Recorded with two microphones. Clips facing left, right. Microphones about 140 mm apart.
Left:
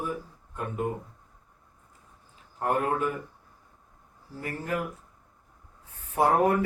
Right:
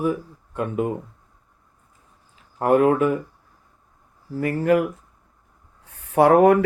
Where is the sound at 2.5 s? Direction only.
90° right.